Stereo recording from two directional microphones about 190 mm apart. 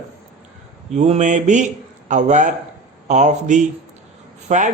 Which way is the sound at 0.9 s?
35° right (ahead or behind).